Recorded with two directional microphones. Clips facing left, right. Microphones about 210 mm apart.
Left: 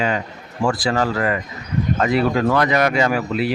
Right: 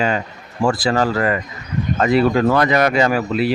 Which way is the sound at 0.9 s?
40° right (ahead or behind).